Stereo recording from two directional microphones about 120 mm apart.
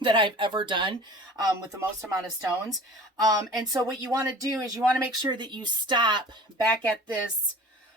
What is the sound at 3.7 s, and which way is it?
A woman's voice, 30° right (ahead or behind).